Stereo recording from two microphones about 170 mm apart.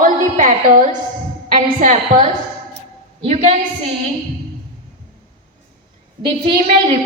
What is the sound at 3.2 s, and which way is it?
Speech, 35° right (ahead or behind).